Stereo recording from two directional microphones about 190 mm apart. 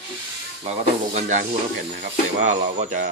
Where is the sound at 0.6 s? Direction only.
35° right (ahead or behind).